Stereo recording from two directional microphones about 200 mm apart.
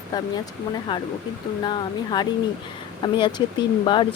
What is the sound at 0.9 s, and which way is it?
Speech, 20° left (ahead or behind).